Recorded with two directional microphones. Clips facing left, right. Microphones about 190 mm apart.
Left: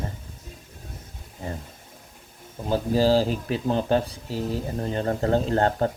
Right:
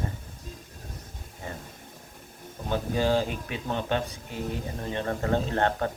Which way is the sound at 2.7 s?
35° left (ahead or behind).